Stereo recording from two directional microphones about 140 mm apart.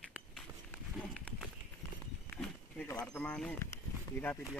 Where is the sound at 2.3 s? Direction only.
10° left (ahead or behind).